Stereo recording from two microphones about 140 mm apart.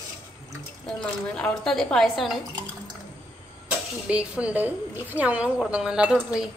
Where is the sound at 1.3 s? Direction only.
5° left (ahead or behind).